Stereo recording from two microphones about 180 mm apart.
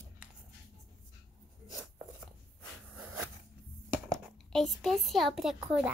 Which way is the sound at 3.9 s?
5° right (ahead or behind).